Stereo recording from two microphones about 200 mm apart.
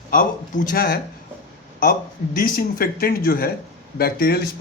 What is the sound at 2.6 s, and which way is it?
Speech, 50° left (ahead or behind).